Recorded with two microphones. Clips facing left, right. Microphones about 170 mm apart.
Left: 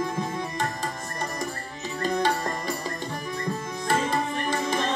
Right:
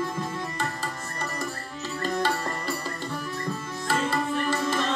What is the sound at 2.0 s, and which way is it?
Tabla, 15° left (ahead or behind).